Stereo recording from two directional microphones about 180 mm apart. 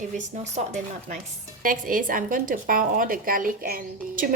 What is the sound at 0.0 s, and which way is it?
Speech, 40° right (ahead or behind).